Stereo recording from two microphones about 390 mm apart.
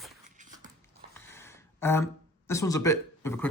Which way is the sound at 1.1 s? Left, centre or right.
Centre.